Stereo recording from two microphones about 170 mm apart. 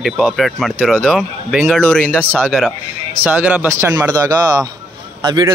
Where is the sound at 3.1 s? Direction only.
10° right (ahead or behind).